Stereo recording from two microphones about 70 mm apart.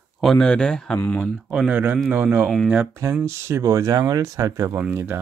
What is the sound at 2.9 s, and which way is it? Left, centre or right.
Speech, right.